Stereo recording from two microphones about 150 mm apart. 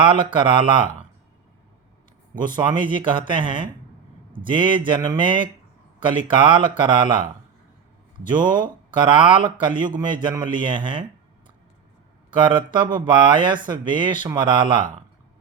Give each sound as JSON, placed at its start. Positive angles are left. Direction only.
{"t": 0.3, "sound": "speech", "side_deg": -35}
{"t": 2.4, "sound": "a man's voice", "side_deg": -30}
{"t": 8.3, "sound": "speech", "side_deg": -30}
{"t": 12.3, "sound": "speech", "side_deg": -30}